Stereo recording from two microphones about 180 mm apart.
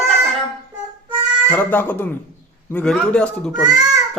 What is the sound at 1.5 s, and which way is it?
A child's voice, 10° left (ahead or behind).